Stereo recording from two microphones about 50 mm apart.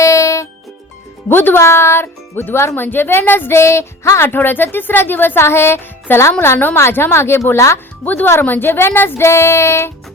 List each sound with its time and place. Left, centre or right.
0.0 s music: left
1.3 s speech: left
1.5 s speech: left
3.6 s music: left
4.2 s speech: left
5.4 s speech: left
8.0 s speech: left